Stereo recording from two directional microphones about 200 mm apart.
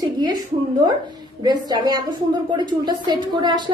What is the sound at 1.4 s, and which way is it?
A woman's voice, 20° right (ahead or behind).